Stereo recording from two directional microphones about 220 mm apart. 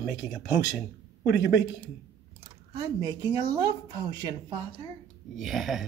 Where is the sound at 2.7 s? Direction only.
15° right (ahead or behind).